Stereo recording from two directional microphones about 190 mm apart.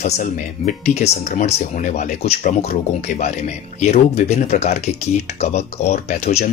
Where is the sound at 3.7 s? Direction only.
35° left (ahead or behind).